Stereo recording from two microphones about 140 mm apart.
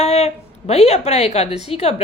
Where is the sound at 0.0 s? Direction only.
50° left (ahead or behind).